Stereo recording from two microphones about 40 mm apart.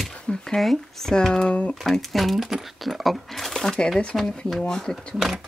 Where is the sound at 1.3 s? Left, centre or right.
Left.